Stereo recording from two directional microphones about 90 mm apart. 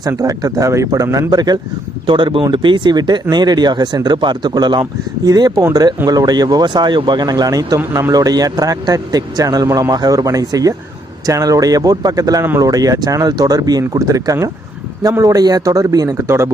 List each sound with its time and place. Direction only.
0.2 s speech: 40° right (ahead or behind)
2.0 s speech: 65° right (ahead or behind); by 16.5 s 30° right (ahead or behind)